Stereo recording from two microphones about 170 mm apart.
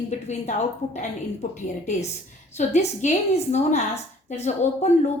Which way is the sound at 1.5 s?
40° left (ahead or behind).